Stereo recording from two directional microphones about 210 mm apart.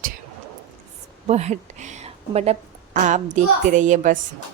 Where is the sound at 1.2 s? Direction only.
30° right (ahead or behind).